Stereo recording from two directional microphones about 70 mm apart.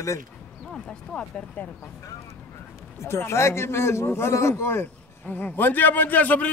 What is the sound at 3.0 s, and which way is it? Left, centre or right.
A man's voice, left.